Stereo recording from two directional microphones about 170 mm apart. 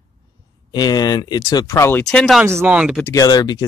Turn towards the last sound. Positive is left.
turn(degrees=25)  # may be behind; listen again after turning